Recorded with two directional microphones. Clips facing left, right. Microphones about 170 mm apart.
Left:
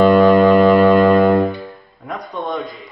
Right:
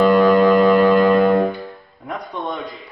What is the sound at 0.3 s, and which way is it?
Music, centre (ahead or behind).